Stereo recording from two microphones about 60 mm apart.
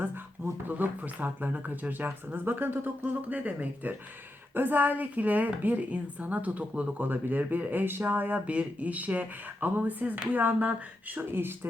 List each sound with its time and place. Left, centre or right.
0.7 s speech: right
7.1 s speech: right